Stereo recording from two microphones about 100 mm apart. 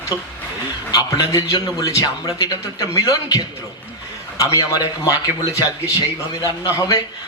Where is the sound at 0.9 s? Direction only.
40° left (ahead or behind).